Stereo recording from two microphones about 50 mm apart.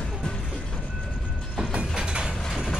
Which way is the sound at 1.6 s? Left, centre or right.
Centre.